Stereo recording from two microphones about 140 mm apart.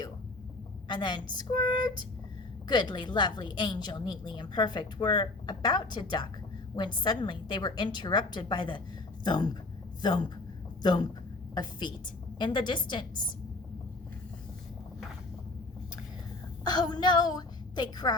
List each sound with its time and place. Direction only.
0.9 s a woman's voice: 35° left (ahead or behind)
11.5 s a woman's voice: 30° left (ahead or behind)
16.6 s a woman's voice: 30° left (ahead or behind)